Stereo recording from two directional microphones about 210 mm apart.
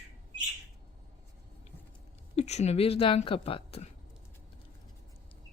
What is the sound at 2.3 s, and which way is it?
Speech, 30° left (ahead or behind).